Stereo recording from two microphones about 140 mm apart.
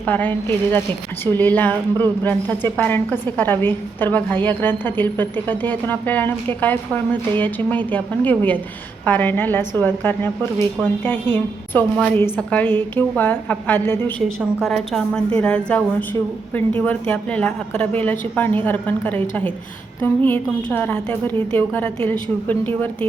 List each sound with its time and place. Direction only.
0.0 s a woman's voice: 10° left (ahead or behind)
14.6 s a woman's voice: 5° left (ahead or behind)
20.2 s a woman's voice: 10° left (ahead or behind)